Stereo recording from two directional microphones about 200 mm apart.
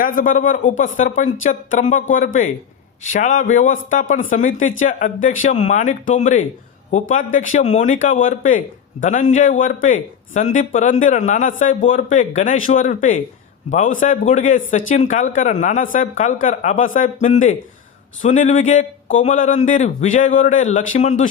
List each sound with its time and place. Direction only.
0.0 s a man's voice: 45° left (ahead or behind)